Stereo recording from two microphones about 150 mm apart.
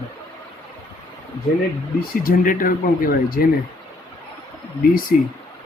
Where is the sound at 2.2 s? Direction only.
70° left (ahead or behind).